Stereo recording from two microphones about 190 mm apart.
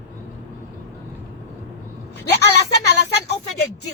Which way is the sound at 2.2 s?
60° left (ahead or behind).